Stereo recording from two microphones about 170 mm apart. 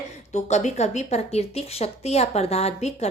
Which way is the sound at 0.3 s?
40° left (ahead or behind).